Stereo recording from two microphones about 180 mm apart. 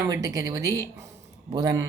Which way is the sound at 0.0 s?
20° right (ahead or behind).